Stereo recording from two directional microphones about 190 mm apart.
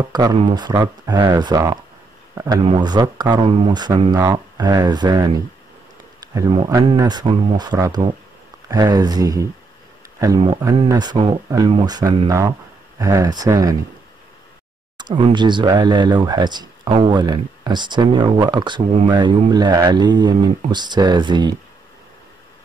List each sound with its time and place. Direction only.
0.1 s speech: 20° right (ahead or behind)
6.9 s speech: 20° right (ahead or behind)
15.0 s speech: 25° right (ahead or behind)